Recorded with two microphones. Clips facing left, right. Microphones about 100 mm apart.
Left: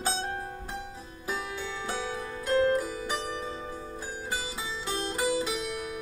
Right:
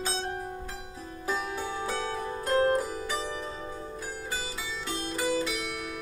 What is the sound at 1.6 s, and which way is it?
Zither, 45° right (ahead or behind).